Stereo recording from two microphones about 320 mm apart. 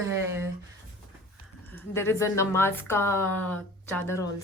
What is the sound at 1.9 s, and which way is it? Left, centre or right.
A woman's voice, centre.